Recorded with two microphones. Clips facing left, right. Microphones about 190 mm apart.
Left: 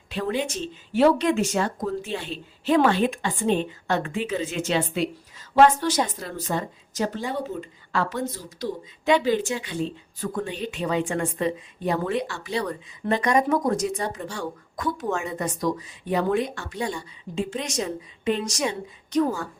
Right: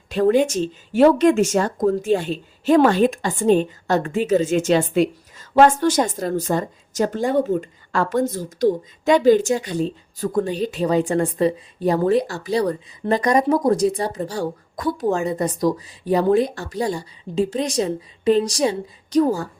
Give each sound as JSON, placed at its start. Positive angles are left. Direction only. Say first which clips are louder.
{"t": 0.1, "sound": "speech", "louder": "right 10 dB", "side_deg": -45}